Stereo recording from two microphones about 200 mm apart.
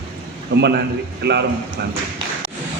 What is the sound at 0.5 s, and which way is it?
Speech, 55° right (ahead or behind).